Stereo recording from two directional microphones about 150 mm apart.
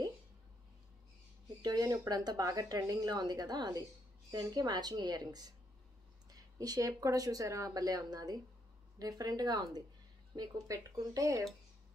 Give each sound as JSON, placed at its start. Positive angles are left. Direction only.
{"t": 1.6, "sound": "speech", "side_deg": -25}